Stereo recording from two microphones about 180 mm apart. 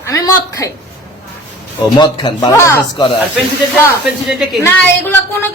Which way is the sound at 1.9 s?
25° left (ahead or behind).